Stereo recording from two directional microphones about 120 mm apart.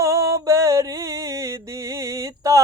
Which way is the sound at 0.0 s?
25° right (ahead or behind).